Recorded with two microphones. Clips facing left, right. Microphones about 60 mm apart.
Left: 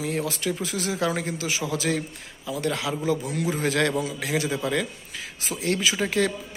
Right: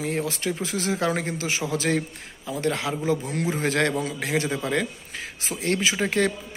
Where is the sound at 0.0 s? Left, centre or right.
Right.